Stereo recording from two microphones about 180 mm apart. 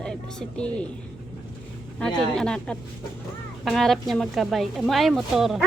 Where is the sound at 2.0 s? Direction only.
5° left (ahead or behind).